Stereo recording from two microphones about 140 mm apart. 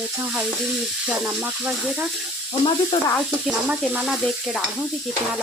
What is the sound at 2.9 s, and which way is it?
Speech, 45° left (ahead or behind).